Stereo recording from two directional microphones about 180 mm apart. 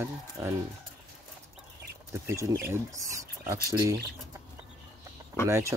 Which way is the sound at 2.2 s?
15° right (ahead or behind).